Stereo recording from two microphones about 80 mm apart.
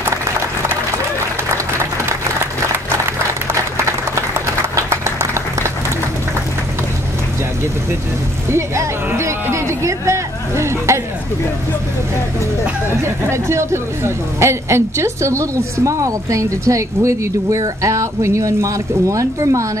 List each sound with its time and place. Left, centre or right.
3.7 s applause: right
8.5 s a sound: right
12.9 s speech: right